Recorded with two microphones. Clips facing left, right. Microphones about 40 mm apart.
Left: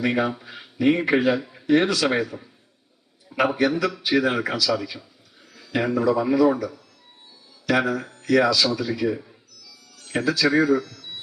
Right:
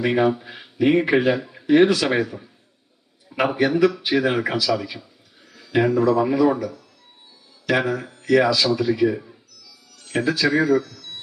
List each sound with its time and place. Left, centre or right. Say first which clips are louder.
0.1 s speech: right 4 dB; centre
1.0 s speech: right 1 dB; centre
3.2 s a man's voice: right 1 dB; centre
4.4 s speech: right 2 dB; right
5.5 s speech: right 4 dB; centre
6.1 s speech: right 1 dB; right
6.4 s speech: left 2 dB; centre
7.8 s speech: even; centre
10.0 s a sound: right 2 dB; centre
10.2 s speech: even; centre
10.8 s radio: even; centre